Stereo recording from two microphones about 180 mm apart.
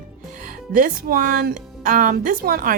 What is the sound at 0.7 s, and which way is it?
Speech, 50° right (ahead or behind).